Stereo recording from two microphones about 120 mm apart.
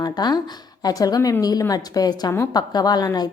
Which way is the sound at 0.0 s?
35° left (ahead or behind).